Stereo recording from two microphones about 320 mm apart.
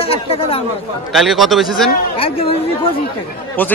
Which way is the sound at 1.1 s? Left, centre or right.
Centre.